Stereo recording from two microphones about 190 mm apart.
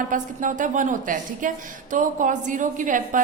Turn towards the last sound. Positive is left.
turn(degrees=-45)  # may be behind; listen again after turning